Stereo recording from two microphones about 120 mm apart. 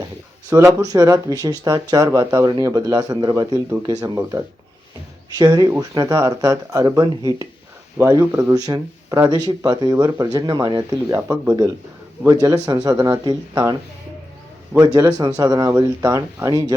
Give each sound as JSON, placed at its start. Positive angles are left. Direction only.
{"t": 0.5, "sound": "speech", "side_deg": -25}
{"t": 4.2, "sound": "speech", "side_deg": -25}
{"t": 5.4, "sound": "speech", "side_deg": -35}
{"t": 8.5, "sound": "speech", "side_deg": -30}
{"t": 14.9, "sound": "speech", "side_deg": -30}